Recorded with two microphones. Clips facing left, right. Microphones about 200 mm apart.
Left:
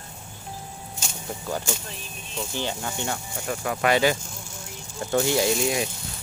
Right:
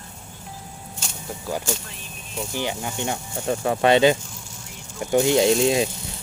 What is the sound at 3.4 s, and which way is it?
Speech, 30° right (ahead or behind).